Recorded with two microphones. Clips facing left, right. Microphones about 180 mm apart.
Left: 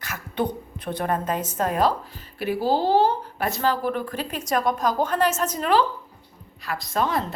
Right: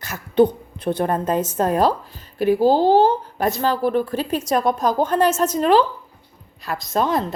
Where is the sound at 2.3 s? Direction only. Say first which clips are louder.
Right 7 dB; 45° right (ahead or behind); by 4.9 s 30° right (ahead or behind).